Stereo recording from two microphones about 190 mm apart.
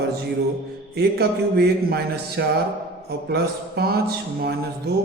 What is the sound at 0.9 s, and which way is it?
A man's voice, 55° right (ahead or behind).